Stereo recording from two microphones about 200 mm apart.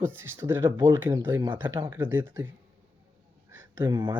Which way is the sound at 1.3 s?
25° right (ahead or behind).